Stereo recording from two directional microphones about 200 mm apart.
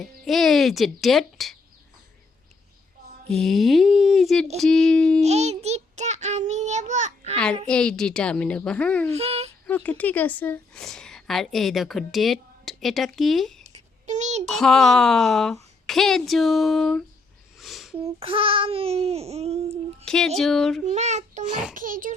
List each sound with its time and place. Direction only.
0.0 s a woman's voice: centre (ahead or behind)
3.3 s a woman's voice: centre (ahead or behind)
5.2 s a child's voice: 35° right (ahead or behind)
7.7 s a woman's voice: 5° left (ahead or behind)
9.0 s a child's voice: 30° right (ahead or behind)
9.6 s a woman's voice: 10° left (ahead or behind)
14.1 s a child's voice: 35° right (ahead or behind)
14.5 s a woman's voice: centre (ahead or behind)
17.6 s a sound: centre (ahead or behind)
18.0 s speech: 25° right (ahead or behind)
20.1 s a woman's voice: centre (ahead or behind)
20.8 s a child's voice: 35° right (ahead or behind)
21.4 s a woman's voice: 5° right (ahead or behind)
21.8 s a child's voice: 40° right (ahead or behind)